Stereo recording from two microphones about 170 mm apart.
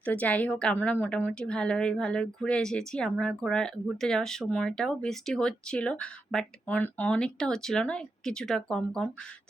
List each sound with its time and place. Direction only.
0.0 s a woman's voice: 10° left (ahead or behind)